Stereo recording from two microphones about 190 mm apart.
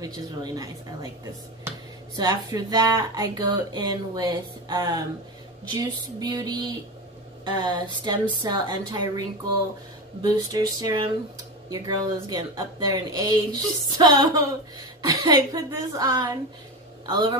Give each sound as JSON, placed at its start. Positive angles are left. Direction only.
{"t": 0.0, "sound": "a woman's voice", "side_deg": -20}